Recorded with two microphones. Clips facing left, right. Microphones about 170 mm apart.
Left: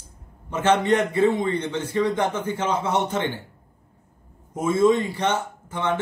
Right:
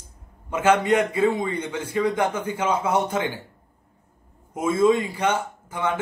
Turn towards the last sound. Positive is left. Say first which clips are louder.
# left 1 dB
turn(degrees=-10)  # may be behind; listen again after turning